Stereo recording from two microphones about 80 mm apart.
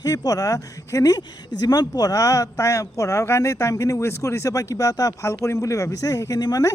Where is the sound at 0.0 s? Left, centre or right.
Left.